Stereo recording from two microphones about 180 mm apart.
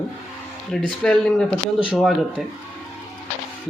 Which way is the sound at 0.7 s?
5° left (ahead or behind).